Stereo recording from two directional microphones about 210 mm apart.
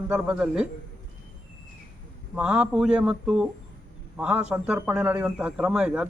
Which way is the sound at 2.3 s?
5° right (ahead or behind).